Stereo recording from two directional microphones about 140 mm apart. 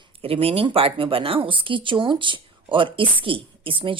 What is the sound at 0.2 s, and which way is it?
Speech, 45° right (ahead or behind).